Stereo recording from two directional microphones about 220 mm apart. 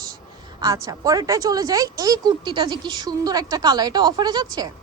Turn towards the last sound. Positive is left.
turn(degrees=-15)  # may be behind; listen again after turning